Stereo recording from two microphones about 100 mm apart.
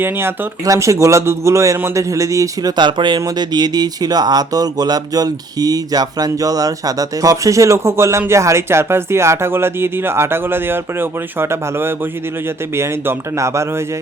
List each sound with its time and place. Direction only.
0.0 s speech: 25° right (ahead or behind)
2.7 s speech: 50° right (ahead or behind); by 13.7 s 30° right (ahead or behind)